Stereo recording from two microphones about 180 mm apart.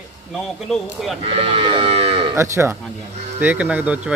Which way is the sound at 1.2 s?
30° right (ahead or behind).